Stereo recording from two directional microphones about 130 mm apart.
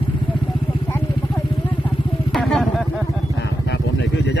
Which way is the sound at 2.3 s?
5° left (ahead or behind).